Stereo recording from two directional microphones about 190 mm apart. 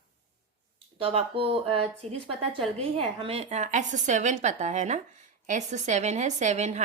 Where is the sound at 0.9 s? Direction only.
30° right (ahead or behind).